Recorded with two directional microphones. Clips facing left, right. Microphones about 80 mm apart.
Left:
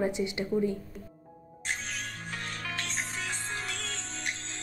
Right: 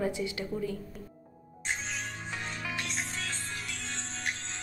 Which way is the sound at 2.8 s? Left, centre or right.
Centre.